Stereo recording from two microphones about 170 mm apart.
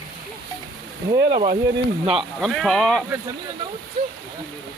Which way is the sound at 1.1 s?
20° right (ahead or behind).